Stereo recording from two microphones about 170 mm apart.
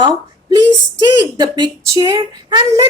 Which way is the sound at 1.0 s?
25° right (ahead or behind).